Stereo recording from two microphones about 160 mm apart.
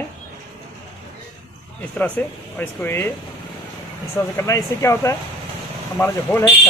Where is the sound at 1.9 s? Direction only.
10° left (ahead or behind).